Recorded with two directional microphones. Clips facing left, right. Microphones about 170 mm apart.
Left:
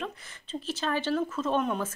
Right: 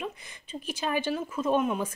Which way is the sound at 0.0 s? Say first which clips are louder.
Right 1 dB; 15° right (ahead or behind).